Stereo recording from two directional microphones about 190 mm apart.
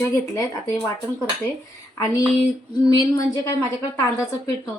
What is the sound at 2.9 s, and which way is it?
Speech, 20° left (ahead or behind).